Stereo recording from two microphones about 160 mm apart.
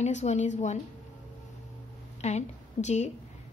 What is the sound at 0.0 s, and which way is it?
Speech, 45° left (ahead or behind).